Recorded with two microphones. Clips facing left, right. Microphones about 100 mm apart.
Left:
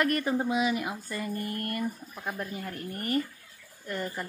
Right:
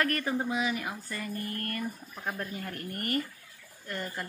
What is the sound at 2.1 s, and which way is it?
Speech, 5° left (ahead or behind).